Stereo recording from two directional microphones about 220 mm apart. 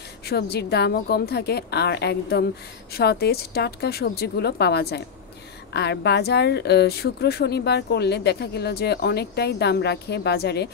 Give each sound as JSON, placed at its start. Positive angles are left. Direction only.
{"t": 0.3, "sound": "a woman's voice", "side_deg": 45}